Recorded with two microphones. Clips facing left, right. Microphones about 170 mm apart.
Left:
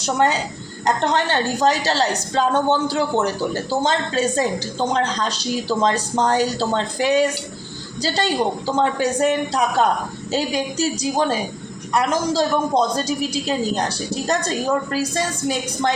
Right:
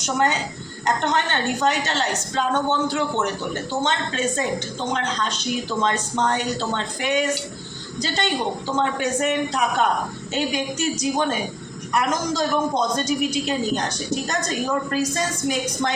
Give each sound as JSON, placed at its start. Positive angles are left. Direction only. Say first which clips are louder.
{"t": 0.0, "sound": "a man's voice", "louder": "left 3 dB", "side_deg": 35}